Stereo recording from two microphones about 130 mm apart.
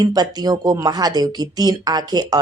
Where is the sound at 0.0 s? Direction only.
30° right (ahead or behind).